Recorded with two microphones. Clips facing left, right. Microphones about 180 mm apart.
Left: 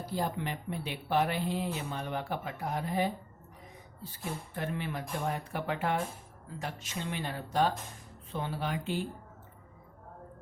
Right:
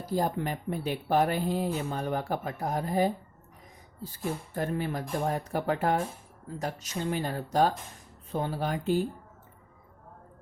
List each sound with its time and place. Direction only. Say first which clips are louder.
0.0 s speech: right 5 dB; 45° right (ahead or behind)
4.5 s speech: right 4 dB; 40° right (ahead or behind)